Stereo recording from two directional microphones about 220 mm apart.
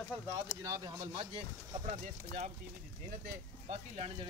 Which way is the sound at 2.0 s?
35° right (ahead or behind).